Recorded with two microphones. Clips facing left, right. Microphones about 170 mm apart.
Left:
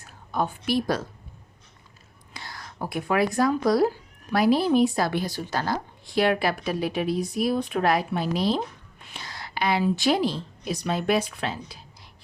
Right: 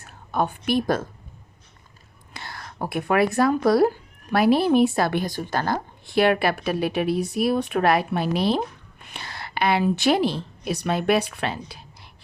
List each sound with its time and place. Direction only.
0.0 s a woman's voice: 60° right (ahead or behind)
2.3 s a woman's voice: 60° right (ahead or behind)